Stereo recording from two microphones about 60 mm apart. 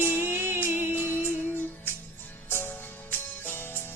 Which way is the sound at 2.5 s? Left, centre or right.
Left.